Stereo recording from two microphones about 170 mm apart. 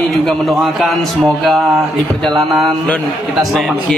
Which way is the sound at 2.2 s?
Centre (ahead or behind).